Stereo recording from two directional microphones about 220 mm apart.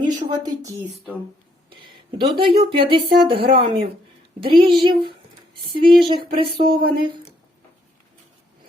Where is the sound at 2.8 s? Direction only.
25° right (ahead or behind).